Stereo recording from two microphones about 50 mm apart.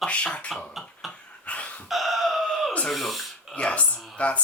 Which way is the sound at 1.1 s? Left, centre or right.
Left.